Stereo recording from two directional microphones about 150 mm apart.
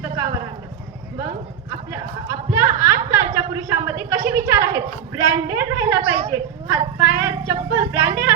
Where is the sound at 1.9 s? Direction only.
20° right (ahead or behind).